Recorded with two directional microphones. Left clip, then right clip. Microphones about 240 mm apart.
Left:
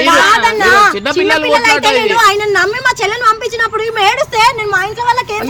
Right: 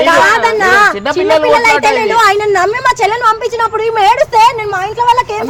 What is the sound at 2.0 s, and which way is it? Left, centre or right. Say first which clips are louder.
A woman's voice: right 1 dB; left.